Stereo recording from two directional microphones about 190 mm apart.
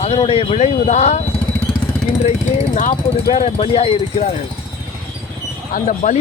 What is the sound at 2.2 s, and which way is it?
Speech, 40° left (ahead or behind).